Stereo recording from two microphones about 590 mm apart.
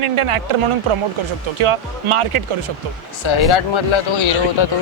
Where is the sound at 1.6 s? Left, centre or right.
Right.